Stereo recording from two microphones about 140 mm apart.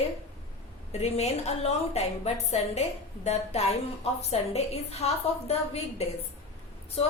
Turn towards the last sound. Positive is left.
turn(degrees=45)  # may be behind; listen again after turning